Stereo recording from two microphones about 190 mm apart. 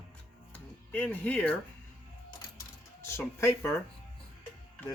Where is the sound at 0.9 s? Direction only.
10° left (ahead or behind).